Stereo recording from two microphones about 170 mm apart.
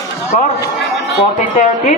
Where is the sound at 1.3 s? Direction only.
45° left (ahead or behind).